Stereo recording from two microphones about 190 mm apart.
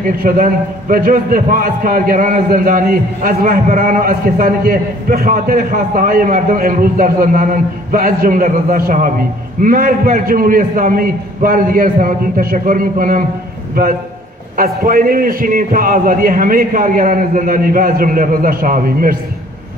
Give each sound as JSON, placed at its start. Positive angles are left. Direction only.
{"t": 0.0, "sound": "a man's voice", "side_deg": -45}